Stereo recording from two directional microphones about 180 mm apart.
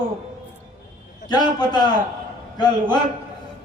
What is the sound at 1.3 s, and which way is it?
A man's voice, 20° left (ahead or behind).